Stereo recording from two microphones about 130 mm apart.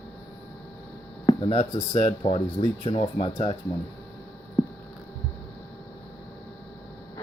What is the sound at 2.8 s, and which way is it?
Speech, 45° left (ahead or behind).